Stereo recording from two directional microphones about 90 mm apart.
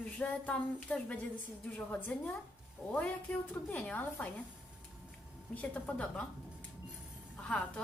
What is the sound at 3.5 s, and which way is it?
Speech, 20° left (ahead or behind).